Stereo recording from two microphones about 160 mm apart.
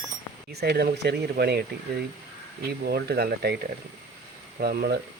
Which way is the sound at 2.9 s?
80° right.